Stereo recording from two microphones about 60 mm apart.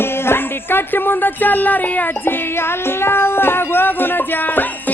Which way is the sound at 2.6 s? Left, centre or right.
Left.